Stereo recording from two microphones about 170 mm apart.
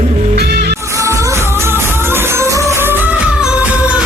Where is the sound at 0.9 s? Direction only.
20° right (ahead or behind).